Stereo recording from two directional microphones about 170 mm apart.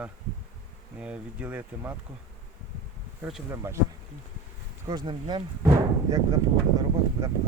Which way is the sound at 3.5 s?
15° right (ahead or behind).